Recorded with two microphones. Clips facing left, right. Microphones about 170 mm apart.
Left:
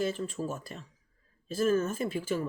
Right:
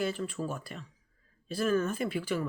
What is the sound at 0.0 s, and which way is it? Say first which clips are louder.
Speech: left 1 dB; 40° left (ahead or behind).